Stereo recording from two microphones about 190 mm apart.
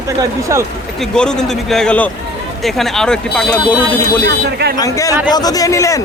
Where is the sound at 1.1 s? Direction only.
5° left (ahead or behind).